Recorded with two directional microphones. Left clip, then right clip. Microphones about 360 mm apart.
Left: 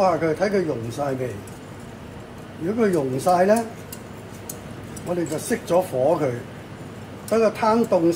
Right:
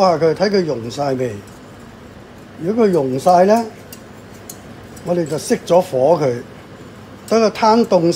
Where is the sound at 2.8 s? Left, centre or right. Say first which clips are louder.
Right 7 dB; right.